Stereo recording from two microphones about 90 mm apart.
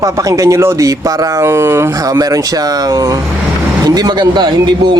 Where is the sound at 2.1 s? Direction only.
40° right (ahead or behind).